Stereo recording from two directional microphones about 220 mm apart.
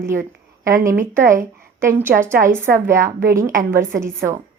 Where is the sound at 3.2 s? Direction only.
15° right (ahead or behind).